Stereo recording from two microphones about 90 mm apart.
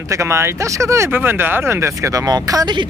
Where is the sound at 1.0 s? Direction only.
20° right (ahead or behind); by 2.7 s 45° right (ahead or behind).